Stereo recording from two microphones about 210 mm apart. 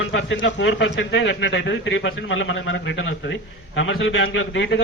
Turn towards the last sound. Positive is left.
turn(degrees=60)  # may be behind; listen again after turning